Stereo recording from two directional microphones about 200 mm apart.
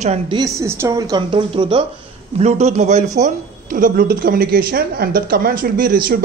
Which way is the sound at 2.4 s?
35° right (ahead or behind).